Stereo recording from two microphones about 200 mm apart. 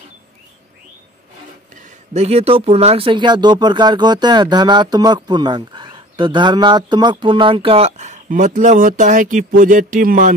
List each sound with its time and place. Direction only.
1.8 s speech: 30° right (ahead or behind)